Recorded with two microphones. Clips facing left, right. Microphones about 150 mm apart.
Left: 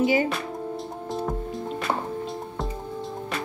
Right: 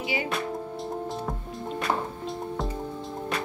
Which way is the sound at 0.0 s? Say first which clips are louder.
Left 9 dB; 45° left (ahead or behind).